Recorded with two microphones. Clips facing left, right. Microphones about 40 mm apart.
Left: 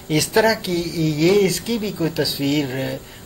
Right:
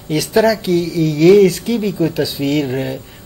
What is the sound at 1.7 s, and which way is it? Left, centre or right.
Speech, centre.